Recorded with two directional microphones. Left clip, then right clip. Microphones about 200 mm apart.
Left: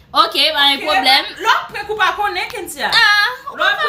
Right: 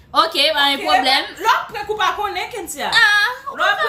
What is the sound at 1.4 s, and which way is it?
A woman's voice, 15° right (ahead or behind).